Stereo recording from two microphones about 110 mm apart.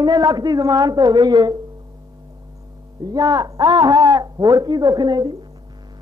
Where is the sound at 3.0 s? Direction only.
35° right (ahead or behind).